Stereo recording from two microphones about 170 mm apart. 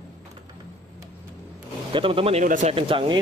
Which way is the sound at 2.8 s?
30° right (ahead or behind).